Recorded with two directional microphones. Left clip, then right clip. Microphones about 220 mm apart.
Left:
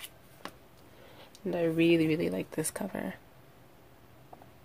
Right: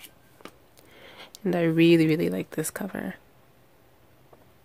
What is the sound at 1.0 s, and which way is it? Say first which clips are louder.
Speech: right 8 dB; 40° right (ahead or behind).